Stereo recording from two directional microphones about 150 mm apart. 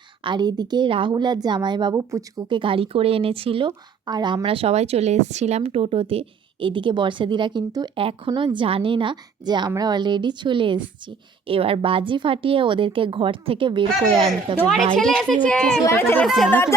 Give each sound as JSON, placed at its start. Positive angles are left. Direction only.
{"t": 0.3, "sound": "a woman's voice", "side_deg": -30}
{"t": 2.5, "sound": "a woman's voice", "side_deg": -35}
{"t": 14.9, "sound": "a child's voice", "side_deg": 5}
{"t": 15.8, "sound": "speech", "side_deg": 15}
{"t": 16.2, "sound": "a child's voice", "side_deg": 0}
{"t": 16.5, "sound": "speech", "side_deg": 15}